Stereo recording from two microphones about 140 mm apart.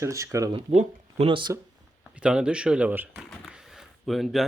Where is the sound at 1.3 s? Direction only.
35° right (ahead or behind).